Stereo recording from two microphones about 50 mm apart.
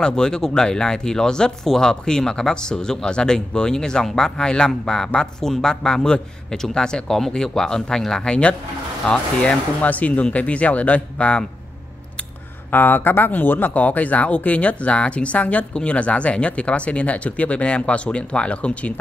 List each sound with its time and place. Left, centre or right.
0.0 s speech: centre
12.7 s speech: left